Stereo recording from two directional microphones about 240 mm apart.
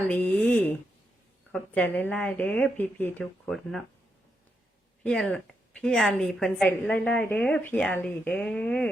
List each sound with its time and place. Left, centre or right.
0.1 s a sound: centre
1.5 s a woman's voice: centre
5.0 s a woman's voice: centre